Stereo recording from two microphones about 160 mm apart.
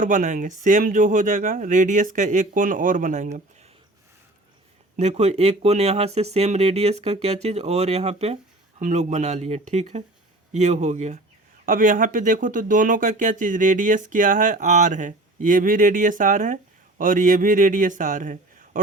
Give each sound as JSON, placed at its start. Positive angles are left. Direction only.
{"t": 0.0, "sound": "speech", "side_deg": -50}
{"t": 4.9, "sound": "speech", "side_deg": -45}